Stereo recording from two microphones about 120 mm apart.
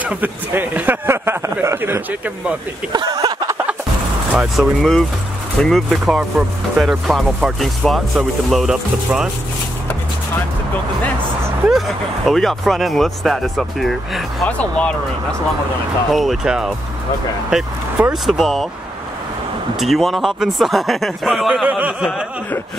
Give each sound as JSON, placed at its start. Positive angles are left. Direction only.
{"t": 0.0, "sound": "a man's voice", "side_deg": -15}
{"t": 2.9, "sound": "speech", "side_deg": -35}
{"t": 4.3, "sound": "speech", "side_deg": -10}
{"t": 12.3, "sound": "speech", "side_deg": 0}
{"t": 16.1, "sound": "speech", "side_deg": 0}
{"t": 19.8, "sound": "speech", "side_deg": 0}
{"t": 21.6, "sound": "a man's voice", "side_deg": -10}